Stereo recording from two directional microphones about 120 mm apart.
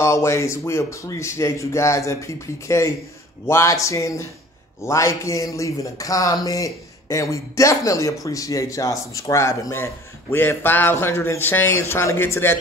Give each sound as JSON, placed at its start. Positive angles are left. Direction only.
{"t": 0.0, "sound": "a man's voice", "side_deg": 25}